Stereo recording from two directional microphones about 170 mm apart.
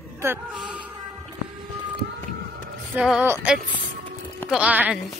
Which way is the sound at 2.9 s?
5° right (ahead or behind).